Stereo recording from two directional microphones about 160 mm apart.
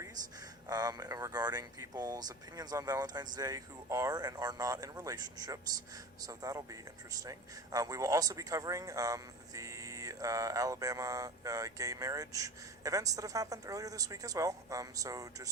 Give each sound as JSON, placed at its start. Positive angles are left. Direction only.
{"t": 0.7, "sound": "speech", "side_deg": -25}